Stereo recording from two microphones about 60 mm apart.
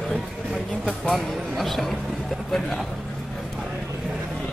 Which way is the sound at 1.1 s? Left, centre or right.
Centre.